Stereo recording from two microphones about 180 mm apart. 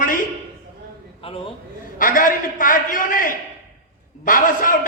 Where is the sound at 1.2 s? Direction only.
30° left (ahead or behind).